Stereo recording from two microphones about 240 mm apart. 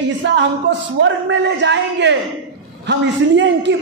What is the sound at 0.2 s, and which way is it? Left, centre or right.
A man's voice, right.